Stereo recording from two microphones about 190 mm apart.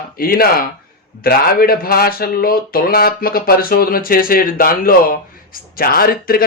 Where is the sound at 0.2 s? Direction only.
50° left (ahead or behind).